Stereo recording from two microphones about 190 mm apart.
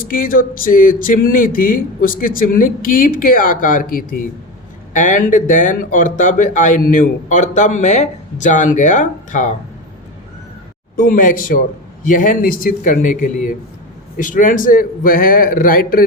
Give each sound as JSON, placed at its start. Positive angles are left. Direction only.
{"t": 0.1, "sound": "speech", "side_deg": 45}
{"t": 10.9, "sound": "speech", "side_deg": 45}